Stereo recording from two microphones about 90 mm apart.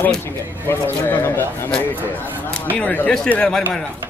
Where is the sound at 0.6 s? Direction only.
25° left (ahead or behind).